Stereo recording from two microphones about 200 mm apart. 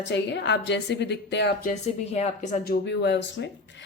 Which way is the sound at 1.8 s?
35° left (ahead or behind).